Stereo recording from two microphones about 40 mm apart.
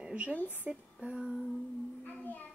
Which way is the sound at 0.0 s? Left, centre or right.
Right.